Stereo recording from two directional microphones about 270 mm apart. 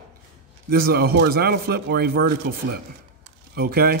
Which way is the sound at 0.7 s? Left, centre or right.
Right.